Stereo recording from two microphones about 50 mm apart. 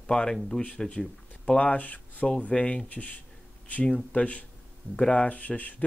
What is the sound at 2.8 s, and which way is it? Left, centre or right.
Speech, left.